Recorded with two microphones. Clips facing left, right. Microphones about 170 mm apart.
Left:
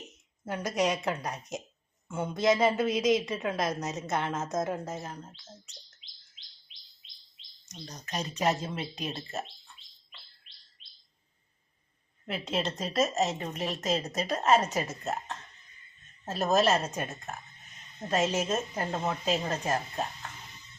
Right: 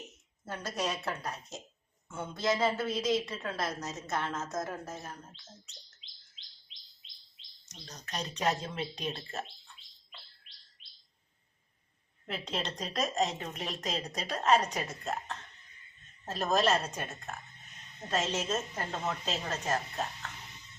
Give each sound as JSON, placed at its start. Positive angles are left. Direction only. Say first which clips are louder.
{"t": 0.4, "sound": "a woman's voice", "louder": "left 6 dB", "side_deg": 15}
{"t": 8.0, "sound": "a woman's voice", "louder": "left 3 dB", "side_deg": 10}
{"t": 12.3, "sound": "a woman's voice", "louder": "left 5 dB", "side_deg": 5}
{"t": 16.2, "sound": "a woman's voice", "louder": "left 3 dB", "side_deg": 5}
{"t": 18.1, "sound": "a woman's voice", "louder": "left 4 dB", "side_deg": 10}